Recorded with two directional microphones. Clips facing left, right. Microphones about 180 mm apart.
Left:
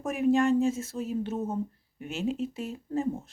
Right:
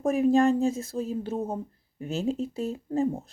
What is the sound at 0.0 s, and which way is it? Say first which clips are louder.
Speech: right 3 dB; 35° right (ahead or behind).